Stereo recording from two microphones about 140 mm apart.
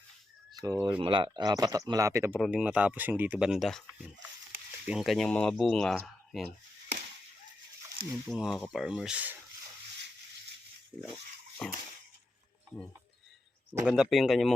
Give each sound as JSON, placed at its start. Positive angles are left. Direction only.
{"t": 0.6, "sound": "speech", "side_deg": -25}
{"t": 2.4, "sound": "speech", "side_deg": -10}
{"t": 8.1, "sound": "speech", "side_deg": 0}
{"t": 11.6, "sound": "speech", "side_deg": 5}
{"t": 13.8, "sound": "speech", "side_deg": -5}